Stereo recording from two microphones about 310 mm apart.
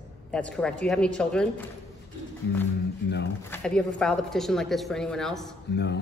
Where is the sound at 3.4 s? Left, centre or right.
Centre.